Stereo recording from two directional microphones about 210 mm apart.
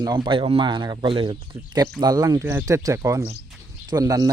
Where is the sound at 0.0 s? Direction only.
20° right (ahead or behind).